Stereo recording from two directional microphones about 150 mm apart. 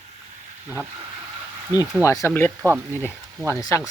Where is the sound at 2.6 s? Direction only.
20° right (ahead or behind).